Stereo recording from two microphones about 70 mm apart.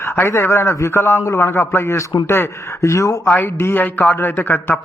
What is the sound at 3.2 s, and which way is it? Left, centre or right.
A man's voice, left.